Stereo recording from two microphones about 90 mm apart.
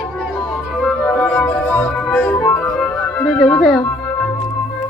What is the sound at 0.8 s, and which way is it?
Music, centre (ahead or behind).